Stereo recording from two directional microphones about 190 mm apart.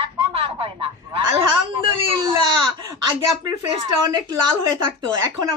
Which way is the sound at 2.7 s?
25° right (ahead or behind).